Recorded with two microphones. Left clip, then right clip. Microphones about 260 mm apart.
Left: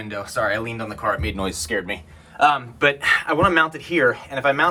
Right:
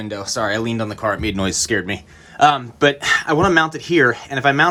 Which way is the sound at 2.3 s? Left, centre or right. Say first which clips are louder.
Right 3 dB; right.